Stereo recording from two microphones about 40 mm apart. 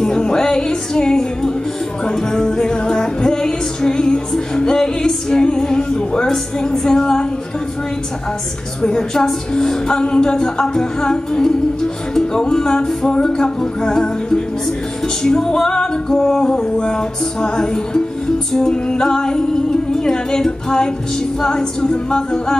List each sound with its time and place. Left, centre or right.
0.0 s music: centre
6.3 s a woman's voice: centre
8.8 s a woman's voice: centre
16.7 s music: centre
18.5 s a woman's voice: centre
21.4 s music: centre